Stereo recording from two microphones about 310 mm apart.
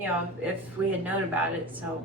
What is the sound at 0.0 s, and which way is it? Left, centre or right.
Speech, centre.